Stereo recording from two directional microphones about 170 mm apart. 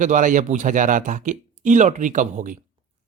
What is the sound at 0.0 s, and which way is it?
Speech, 50° right (ahead or behind).